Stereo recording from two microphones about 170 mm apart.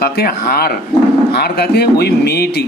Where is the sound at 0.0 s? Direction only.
60° left (ahead or behind).